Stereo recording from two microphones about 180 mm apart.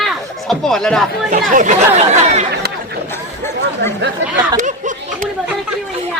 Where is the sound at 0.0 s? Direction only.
Centre (ahead or behind).